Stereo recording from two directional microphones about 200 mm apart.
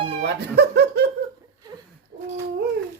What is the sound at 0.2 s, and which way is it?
Speech, 55° right (ahead or behind).